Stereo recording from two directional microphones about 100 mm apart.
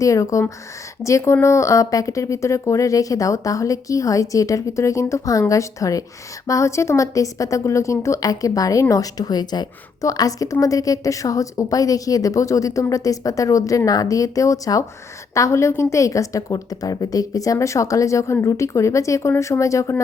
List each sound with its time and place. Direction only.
0.0 s a woman's voice: 35° left (ahead or behind)